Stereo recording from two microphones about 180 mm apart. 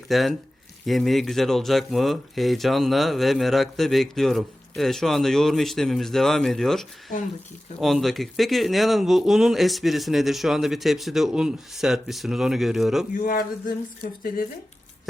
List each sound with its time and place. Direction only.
0.1 s speech: centre (ahead or behind)
13.1 s speech: 50° left (ahead or behind)